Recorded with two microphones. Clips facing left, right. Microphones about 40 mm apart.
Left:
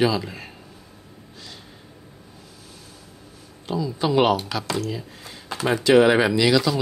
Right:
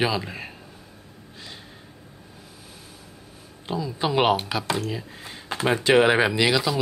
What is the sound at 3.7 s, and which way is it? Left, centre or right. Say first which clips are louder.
A man's voice: left 3 dB; centre.